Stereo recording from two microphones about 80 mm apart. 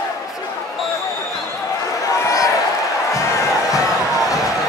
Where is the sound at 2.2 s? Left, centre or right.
Left.